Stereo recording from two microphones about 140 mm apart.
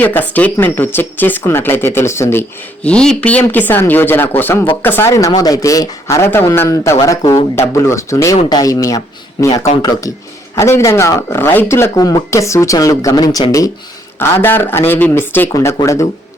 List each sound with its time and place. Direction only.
0.0 s speech: 15° left (ahead or behind)
2.8 s speech: 5° left (ahead or behind); by 16.0 s 20° left (ahead or behind)